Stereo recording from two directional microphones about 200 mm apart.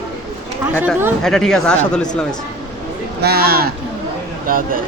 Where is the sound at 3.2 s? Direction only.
50° right (ahead or behind).